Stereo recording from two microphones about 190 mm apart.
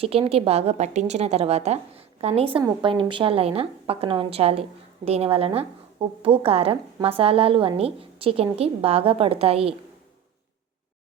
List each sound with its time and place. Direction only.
0.0 s a woman's voice: 30° right (ahead or behind)